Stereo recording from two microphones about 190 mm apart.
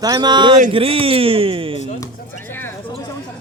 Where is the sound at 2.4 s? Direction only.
10° left (ahead or behind).